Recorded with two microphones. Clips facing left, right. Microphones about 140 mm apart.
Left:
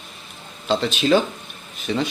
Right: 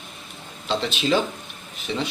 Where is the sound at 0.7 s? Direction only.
45° left (ahead or behind).